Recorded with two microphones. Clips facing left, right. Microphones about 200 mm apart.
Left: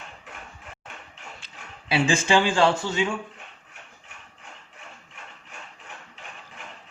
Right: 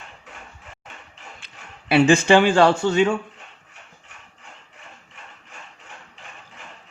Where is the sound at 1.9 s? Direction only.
60° right (ahead or behind).